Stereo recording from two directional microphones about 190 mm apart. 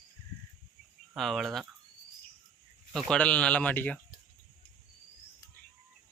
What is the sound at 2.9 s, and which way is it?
Speech, 5° left (ahead or behind).